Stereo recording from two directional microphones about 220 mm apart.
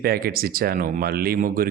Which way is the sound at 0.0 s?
45° right (ahead or behind).